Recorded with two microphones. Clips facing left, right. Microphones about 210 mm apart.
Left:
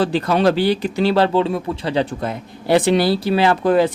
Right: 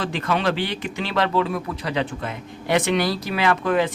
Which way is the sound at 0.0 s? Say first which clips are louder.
Left 7 dB; 35° left (ahead or behind).